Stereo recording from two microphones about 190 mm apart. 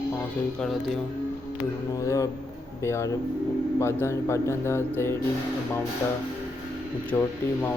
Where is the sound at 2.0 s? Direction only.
15° left (ahead or behind).